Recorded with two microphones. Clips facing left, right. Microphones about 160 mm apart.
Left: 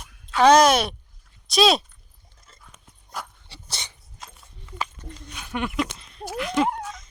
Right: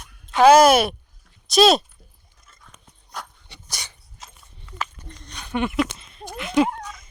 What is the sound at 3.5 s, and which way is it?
Dog, 30° left (ahead or behind).